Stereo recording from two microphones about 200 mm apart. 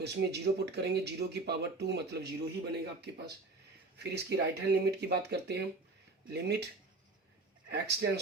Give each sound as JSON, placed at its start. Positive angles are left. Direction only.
{"t": 0.0, "sound": "speech", "side_deg": -55}
{"t": 7.7, "sound": "speech", "side_deg": -55}